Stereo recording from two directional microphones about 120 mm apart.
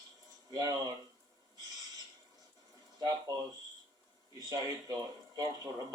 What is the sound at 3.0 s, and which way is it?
Speech, 30° right (ahead or behind).